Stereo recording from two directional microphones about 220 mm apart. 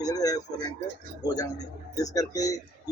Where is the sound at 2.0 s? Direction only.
15° left (ahead or behind).